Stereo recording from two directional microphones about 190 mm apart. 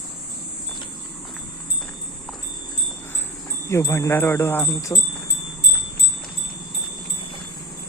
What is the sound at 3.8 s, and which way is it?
Speech, 15° left (ahead or behind).